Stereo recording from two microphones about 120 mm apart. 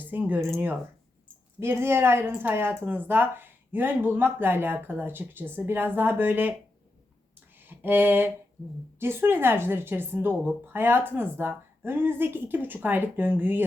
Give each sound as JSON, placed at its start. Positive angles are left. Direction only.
{"t": 0.0, "sound": "speech", "side_deg": -15}
{"t": 7.3, "sound": "a sound", "side_deg": -15}
{"t": 9.0, "sound": "speech", "side_deg": -20}